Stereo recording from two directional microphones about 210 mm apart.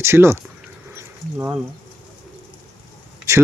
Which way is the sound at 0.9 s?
10° right (ahead or behind).